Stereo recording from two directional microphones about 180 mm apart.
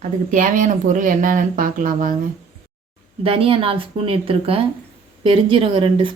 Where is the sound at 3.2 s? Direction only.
30° right (ahead or behind).